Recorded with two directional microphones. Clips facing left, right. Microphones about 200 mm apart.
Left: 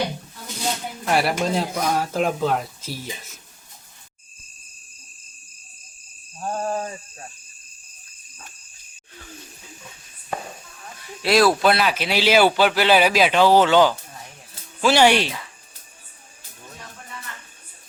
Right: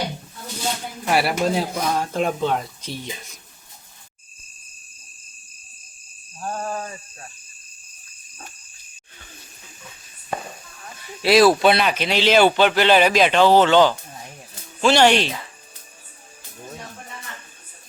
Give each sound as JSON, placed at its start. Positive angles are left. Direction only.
{"t": 1.0, "sound": "speech", "side_deg": 0}
{"t": 6.4, "sound": "speech", "side_deg": 15}
{"t": 10.8, "sound": "speech", "side_deg": 0}